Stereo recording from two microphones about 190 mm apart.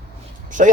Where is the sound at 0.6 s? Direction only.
40° right (ahead or behind).